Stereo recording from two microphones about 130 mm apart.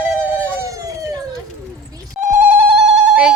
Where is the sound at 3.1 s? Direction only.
5° right (ahead or behind).